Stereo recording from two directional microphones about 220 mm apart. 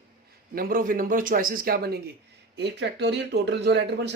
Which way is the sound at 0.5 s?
40° right (ahead or behind).